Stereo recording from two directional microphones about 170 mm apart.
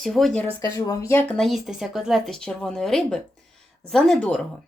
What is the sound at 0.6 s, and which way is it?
Speech, 15° left (ahead or behind).